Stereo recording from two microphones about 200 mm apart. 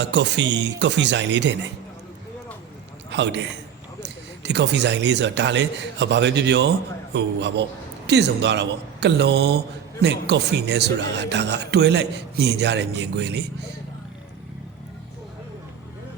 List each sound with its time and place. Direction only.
0.0 s speech: 60° right (ahead or behind)
3.1 s a man's voice: 60° right (ahead or behind)